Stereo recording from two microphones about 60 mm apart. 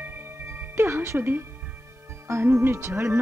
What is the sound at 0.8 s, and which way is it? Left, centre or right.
Music, right.